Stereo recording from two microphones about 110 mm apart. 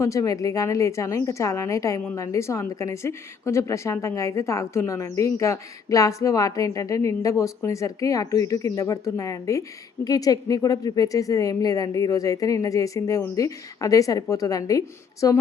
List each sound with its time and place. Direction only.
0.0 s a woman's voice: 30° left (ahead or behind)